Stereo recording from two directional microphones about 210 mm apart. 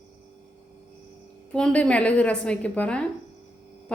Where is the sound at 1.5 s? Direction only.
5° left (ahead or behind).